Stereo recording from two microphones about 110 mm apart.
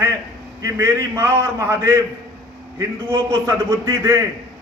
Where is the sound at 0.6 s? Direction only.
30° right (ahead or behind).